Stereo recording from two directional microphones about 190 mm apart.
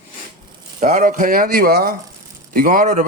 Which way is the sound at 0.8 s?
40° right (ahead or behind).